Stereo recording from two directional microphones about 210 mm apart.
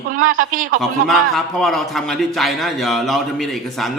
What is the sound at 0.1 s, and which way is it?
Speech, 40° right (ahead or behind).